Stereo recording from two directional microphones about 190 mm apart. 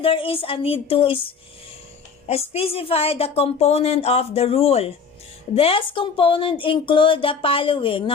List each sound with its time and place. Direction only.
0.0 s speech: 30° left (ahead or behind)
2.2 s a woman's voice: 30° left (ahead or behind)